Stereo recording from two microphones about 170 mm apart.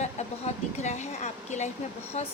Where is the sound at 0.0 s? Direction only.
40° left (ahead or behind).